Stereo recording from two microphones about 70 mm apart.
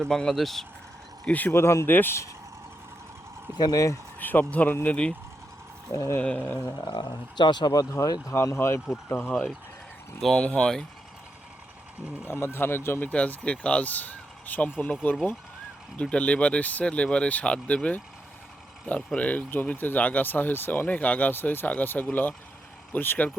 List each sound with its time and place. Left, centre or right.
0.0 s speech: centre
1.2 s speech: left
1.5 s speech: left
1.9 s speech: left
3.6 s speech: left
4.2 s speech: left
5.9 s speech: left
6.2 s speech: left
6.9 s speech: left
8.5 s speech: left
9.0 s speech: left
10.2 s speech: centre
12.3 s speech: left
16.0 s speech: centre